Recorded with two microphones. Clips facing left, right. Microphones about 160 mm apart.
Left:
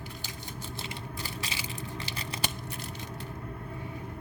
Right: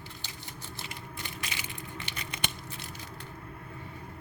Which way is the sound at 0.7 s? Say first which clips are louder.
Left 2 dB; 30° left (ahead or behind).